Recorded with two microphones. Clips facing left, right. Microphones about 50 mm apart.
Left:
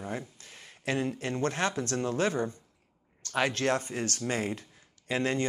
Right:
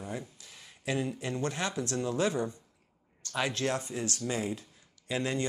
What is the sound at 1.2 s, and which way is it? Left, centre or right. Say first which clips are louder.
Speech: left 3 dB; left.